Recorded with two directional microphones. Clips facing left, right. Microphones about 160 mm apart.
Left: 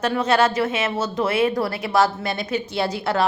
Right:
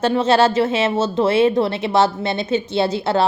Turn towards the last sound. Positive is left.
turn(degrees=-25)  # may be behind; listen again after turning